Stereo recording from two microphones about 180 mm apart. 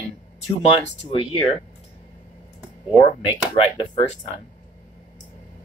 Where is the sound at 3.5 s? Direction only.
30° left (ahead or behind).